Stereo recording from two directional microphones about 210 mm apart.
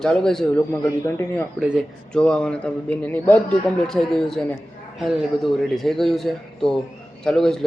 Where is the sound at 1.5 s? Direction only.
5° right (ahead or behind).